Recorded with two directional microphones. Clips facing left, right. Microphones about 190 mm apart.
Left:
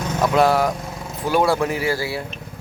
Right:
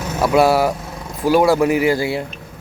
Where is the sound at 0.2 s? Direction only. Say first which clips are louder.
Right 3 dB; 10° right (ahead or behind).